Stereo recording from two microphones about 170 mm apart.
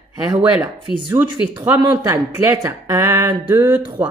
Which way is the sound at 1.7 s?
20° right (ahead or behind).